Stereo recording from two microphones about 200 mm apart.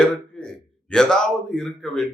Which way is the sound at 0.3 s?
5° left (ahead or behind).